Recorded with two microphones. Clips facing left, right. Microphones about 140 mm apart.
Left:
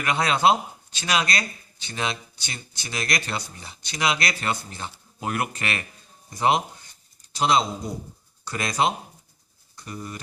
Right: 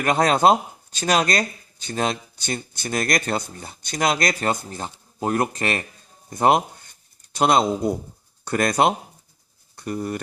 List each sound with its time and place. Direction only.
0.0 s speech: 45° right (ahead or behind)
6.3 s speech: 55° right (ahead or behind)